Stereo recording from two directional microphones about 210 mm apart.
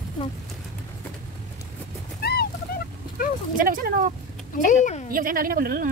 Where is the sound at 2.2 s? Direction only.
50° left (ahead or behind).